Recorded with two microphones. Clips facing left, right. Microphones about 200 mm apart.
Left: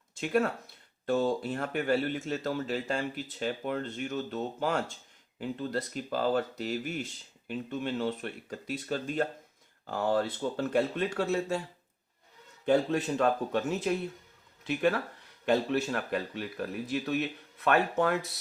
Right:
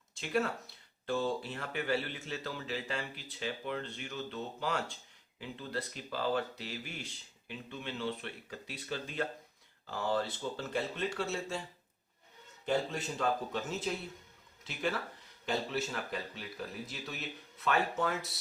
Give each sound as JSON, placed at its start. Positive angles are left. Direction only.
{"t": 0.2, "sound": "speech", "side_deg": 50}
{"t": 12.6, "sound": "speech", "side_deg": 60}